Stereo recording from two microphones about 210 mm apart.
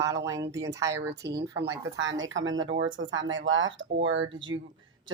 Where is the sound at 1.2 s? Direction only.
55° right (ahead or behind).